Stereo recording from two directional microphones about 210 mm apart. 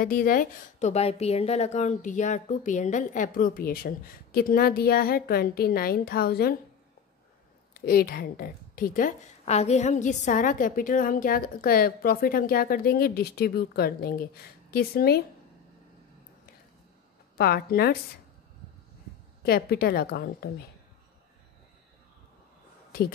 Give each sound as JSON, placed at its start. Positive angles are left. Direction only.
{"t": 0.0, "sound": "a woman's voice", "side_deg": 45}
{"t": 7.7, "sound": "a woman's voice", "side_deg": 45}
{"t": 17.4, "sound": "a woman's voice", "side_deg": 45}
{"t": 19.4, "sound": "a woman's voice", "side_deg": 45}